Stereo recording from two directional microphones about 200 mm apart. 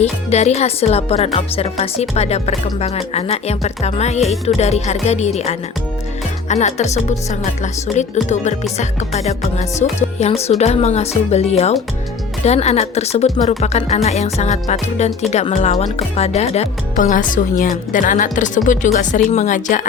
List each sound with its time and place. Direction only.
0.0 s speech: 35° left (ahead or behind)